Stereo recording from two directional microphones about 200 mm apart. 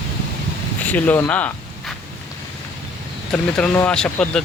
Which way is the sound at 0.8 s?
10° left (ahead or behind).